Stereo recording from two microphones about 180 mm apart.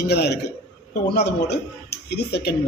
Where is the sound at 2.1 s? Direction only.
65° left (ahead or behind).